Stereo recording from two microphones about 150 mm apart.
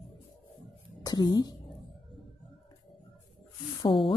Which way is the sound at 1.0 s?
25° left (ahead or behind).